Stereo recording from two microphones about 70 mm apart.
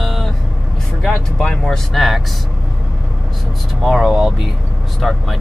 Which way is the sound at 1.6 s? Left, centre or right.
Centre.